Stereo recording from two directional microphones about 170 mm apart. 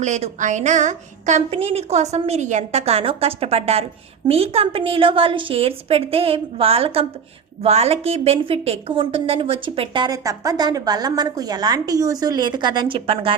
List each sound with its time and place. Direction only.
0.0 s a woman's voice: 45° right (ahead or behind)